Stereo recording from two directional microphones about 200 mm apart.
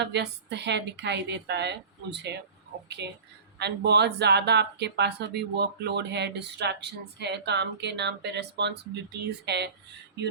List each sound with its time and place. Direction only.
0.0 s speech: 60° right (ahead or behind)